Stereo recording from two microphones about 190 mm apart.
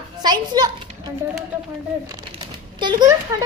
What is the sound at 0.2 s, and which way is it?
Speech, 20° right (ahead or behind).